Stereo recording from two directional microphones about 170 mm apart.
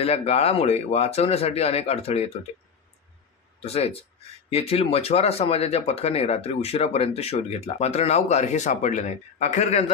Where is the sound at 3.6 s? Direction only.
40° left (ahead or behind).